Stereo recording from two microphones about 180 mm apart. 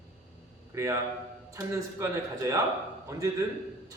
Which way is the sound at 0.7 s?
15° right (ahead or behind).